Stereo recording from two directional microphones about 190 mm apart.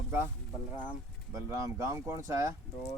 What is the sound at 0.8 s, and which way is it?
Speech, 10° right (ahead or behind).